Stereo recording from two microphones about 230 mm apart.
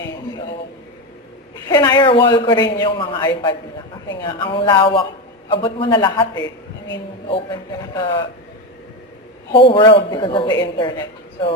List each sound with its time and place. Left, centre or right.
1.6 s a man's voice: centre
6.4 s a sound: left
7.3 s a man's voice: left
9.5 s a man's voice: left